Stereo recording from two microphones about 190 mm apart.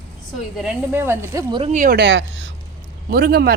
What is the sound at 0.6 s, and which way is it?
A woman's voice, 10° right (ahead or behind).